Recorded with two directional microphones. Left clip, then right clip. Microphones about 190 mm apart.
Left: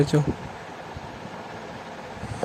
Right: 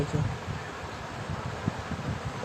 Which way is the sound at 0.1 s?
55° left (ahead or behind).